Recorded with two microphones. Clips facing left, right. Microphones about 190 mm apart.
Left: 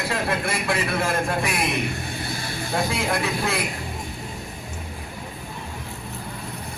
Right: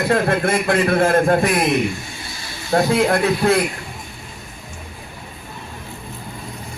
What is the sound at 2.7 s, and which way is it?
Speech, 50° right (ahead or behind).